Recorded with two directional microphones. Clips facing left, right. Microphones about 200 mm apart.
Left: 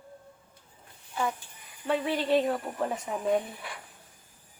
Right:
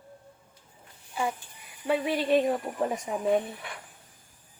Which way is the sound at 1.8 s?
10° right (ahead or behind).